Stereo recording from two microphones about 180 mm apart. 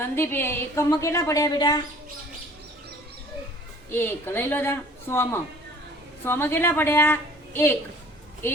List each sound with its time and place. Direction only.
0.0 s a woman's voice: 10° left (ahead or behind)
3.9 s a woman's voice: 10° left (ahead or behind)